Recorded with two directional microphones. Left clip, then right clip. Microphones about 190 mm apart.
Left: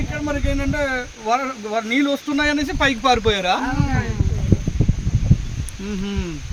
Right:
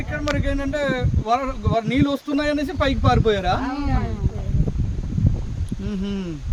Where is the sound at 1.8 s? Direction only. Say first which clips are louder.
Left 2 dB; 50° right (ahead or behind); by 3.5 s 70° right (ahead or behind).